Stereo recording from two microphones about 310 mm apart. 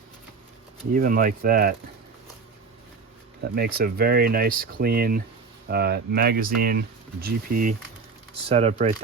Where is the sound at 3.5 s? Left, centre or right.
Right.